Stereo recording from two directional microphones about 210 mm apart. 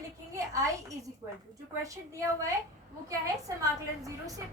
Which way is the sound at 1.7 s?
15° right (ahead or behind).